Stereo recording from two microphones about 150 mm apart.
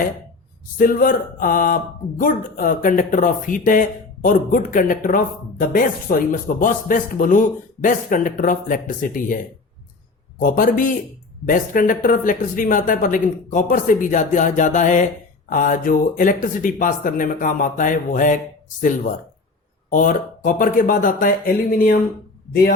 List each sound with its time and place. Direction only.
0.8 s speech: 70° left (ahead or behind)
10.4 s speech: 65° left (ahead or behind)